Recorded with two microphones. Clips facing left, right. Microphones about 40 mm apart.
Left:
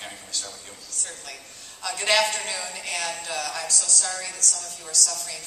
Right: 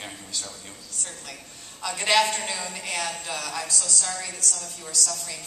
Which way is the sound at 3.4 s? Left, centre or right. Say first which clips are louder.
Left 1 dB; right.